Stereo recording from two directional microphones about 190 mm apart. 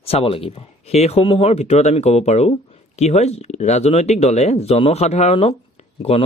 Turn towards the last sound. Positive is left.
turn(degrees=30)  # may be behind; listen again after turning